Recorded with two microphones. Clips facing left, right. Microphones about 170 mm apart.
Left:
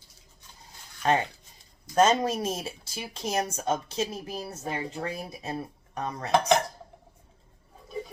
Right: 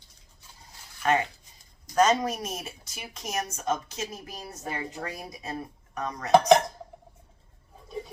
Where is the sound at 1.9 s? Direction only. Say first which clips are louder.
Left 1 dB; 25° left (ahead or behind).